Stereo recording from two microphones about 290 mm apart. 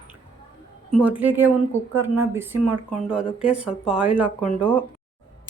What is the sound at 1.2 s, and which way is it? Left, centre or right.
Speech, centre.